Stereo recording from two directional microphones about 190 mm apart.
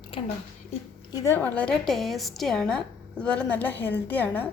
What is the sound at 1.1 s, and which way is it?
A woman's voice, 15° left (ahead or behind).